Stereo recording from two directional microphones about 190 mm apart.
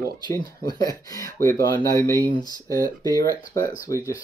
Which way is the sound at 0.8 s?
15° left (ahead or behind).